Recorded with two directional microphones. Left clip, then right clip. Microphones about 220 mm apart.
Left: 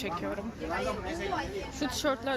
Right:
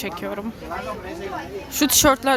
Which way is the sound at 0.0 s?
15° right (ahead or behind).